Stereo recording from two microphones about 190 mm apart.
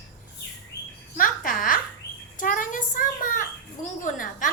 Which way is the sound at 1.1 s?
45° left (ahead or behind).